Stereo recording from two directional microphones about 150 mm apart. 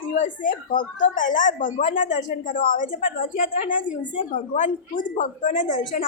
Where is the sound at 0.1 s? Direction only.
60° left (ahead or behind).